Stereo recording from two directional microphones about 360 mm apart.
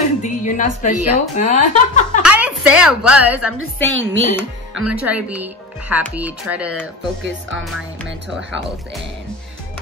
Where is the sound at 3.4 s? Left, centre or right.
Right.